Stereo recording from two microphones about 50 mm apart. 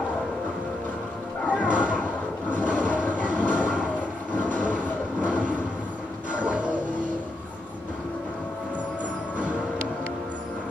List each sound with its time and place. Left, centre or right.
1.6 s a sound: right
2.5 s train: right
5.2 s vehicle: right
6.3 s music: right